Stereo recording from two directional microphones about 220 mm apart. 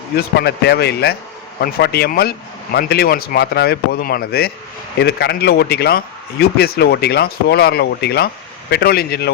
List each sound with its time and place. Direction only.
0.2 s speech: 45° left (ahead or behind)